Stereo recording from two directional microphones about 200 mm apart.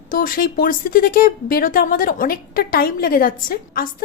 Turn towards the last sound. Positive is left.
turn(degrees=45)  # may be behind; listen again after turning